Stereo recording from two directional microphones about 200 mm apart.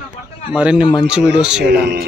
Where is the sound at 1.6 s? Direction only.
50° right (ahead or behind).